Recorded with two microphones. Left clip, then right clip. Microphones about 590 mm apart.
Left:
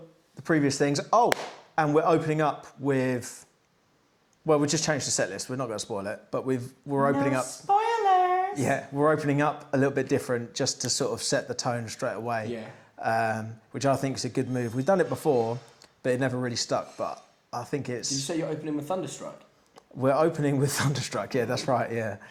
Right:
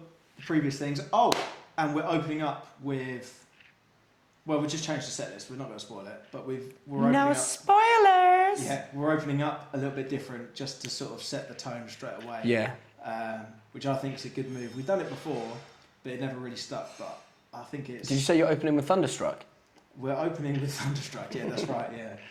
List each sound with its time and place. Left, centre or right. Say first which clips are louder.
0.4 s speech: left 6 dB; left
4.4 s speech: left 6 dB; left
7.7 s child singing: right 3 dB; right
9.0 s speech: left 5 dB; left
18.1 s speech: right 9 dB; right
20.0 s speech: left 8 dB; left